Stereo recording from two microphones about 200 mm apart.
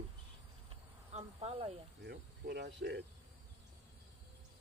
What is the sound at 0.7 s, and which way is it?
Insect, 30° right (ahead or behind).